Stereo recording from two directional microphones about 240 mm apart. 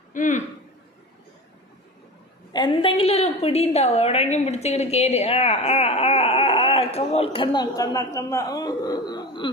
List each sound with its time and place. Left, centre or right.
0.1 s a man's voice: left
2.5 s a woman's voice: centre